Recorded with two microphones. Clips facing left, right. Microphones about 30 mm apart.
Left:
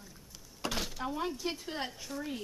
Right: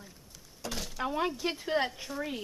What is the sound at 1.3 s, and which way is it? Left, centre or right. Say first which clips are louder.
A woman's voice: right 7 dB; right.